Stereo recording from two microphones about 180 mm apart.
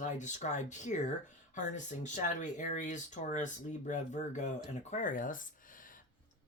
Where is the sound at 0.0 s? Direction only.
40° left (ahead or behind).